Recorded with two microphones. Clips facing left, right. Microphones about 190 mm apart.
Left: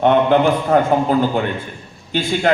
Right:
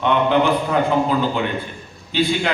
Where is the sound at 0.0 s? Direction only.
45° left (ahead or behind).